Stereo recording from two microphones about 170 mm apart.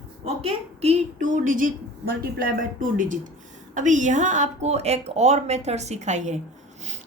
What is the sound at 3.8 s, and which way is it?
A woman's voice, 45° right (ahead or behind).